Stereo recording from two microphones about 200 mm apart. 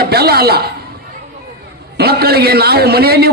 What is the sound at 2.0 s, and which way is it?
A man's voice, 50° right (ahead or behind).